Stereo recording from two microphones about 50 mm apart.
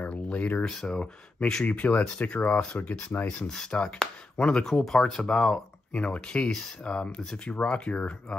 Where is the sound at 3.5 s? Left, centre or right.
Centre.